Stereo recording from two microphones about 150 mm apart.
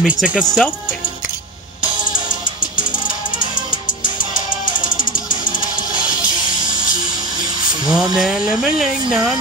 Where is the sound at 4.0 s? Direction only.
60° left (ahead or behind).